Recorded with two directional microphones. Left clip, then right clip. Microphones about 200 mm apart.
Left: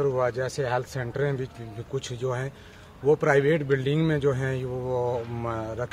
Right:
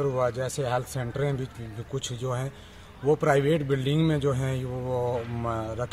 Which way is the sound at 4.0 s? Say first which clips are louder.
Left 2 dB; 25° left (ahead or behind).